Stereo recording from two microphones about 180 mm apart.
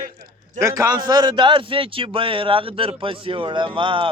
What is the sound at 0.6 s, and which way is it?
A man's voice, 20° right (ahead or behind).